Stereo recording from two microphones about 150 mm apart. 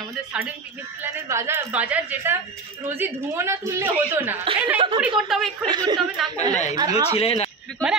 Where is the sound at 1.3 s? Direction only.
20° right (ahead or behind).